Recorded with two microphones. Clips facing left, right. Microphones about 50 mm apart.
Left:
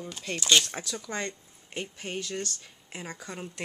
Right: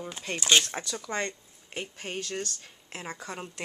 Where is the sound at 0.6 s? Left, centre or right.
Centre.